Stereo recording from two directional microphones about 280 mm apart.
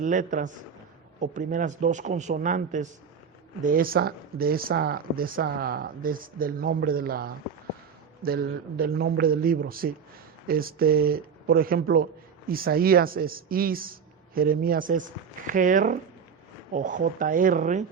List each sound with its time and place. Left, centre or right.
0.0 s a man's voice: right